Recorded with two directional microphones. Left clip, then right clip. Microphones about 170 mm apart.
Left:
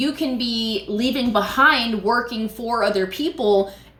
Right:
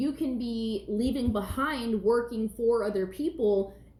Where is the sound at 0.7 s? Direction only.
10° left (ahead or behind).